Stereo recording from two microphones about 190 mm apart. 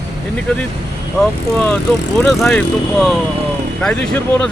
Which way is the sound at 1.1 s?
5° left (ahead or behind).